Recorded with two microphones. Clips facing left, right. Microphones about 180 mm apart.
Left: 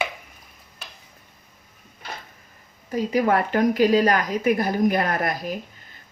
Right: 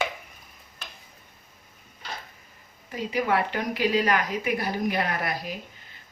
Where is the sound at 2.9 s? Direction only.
40° left (ahead or behind).